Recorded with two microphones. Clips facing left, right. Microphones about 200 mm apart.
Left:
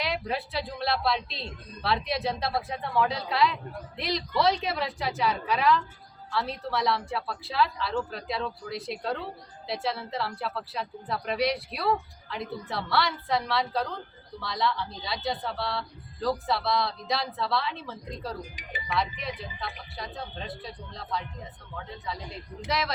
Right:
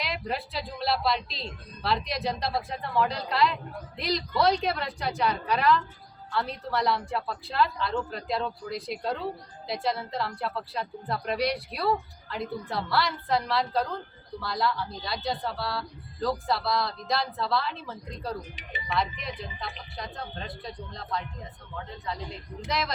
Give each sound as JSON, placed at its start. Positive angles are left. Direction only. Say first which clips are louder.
{"t": 0.0, "sound": "a woman's voice", "louder": "left 2 dB", "side_deg": 0}
{"t": 18.5, "sound": "speech", "louder": "even", "side_deg": -25}
{"t": 18.9, "sound": "a woman's voice", "louder": "even", "side_deg": 0}
{"t": 22.6, "sound": "a woman's voice", "louder": "left 1 dB", "side_deg": 0}